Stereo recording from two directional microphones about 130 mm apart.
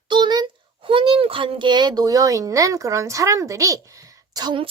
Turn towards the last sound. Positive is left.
turn(degrees=-35)  # may be behind; listen again after turning